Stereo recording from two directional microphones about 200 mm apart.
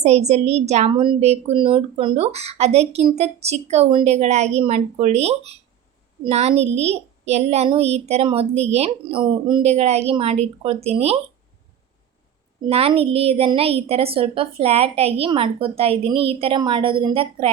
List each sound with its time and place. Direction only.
0.0 s a woman's voice: 35° right (ahead or behind)
12.6 s a woman's voice: 30° right (ahead or behind)